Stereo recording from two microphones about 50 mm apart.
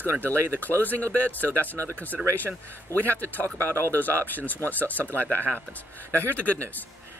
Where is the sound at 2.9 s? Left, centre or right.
Left.